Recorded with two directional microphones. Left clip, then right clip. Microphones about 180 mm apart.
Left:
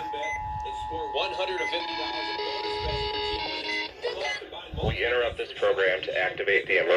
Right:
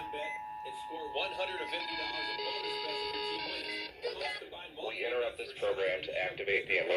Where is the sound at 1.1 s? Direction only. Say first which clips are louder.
Left 6 dB; 10° left (ahead or behind).